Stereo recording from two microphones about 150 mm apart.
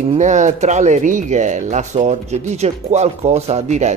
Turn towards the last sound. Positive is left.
turn(degrees=-50)  # may be behind; listen again after turning